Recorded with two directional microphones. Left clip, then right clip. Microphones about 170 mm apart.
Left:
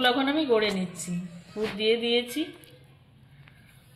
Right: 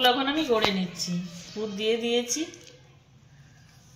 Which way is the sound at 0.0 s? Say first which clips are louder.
Right 1 dB; 15° left (ahead or behind).